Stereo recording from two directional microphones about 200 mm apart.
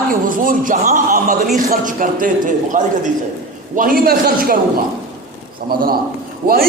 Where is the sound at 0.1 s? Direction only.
45° right (ahead or behind).